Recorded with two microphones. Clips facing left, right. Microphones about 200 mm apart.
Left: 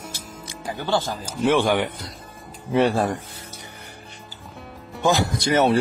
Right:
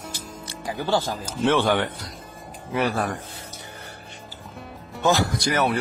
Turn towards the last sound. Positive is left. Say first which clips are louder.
# left 4 dB
turn(degrees=25)  # may be behind; listen again after turning